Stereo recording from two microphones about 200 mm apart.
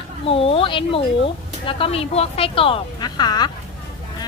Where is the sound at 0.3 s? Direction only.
30° left (ahead or behind).